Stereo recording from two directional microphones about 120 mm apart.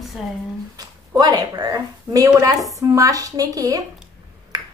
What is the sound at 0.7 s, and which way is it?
A woman's voice, 35° right (ahead or behind).